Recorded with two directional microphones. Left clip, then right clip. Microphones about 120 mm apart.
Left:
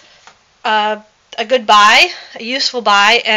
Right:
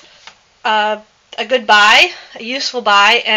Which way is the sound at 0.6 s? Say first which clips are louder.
Even; 45° left (ahead or behind).